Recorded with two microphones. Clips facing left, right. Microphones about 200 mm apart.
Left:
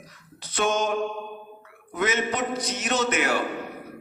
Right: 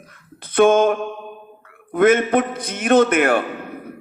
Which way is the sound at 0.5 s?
55° right (ahead or behind).